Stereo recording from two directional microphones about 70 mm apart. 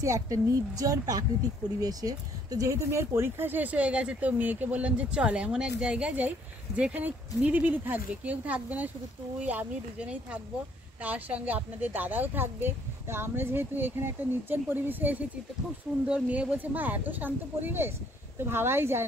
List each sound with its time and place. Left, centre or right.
0.0 s a woman's voice: right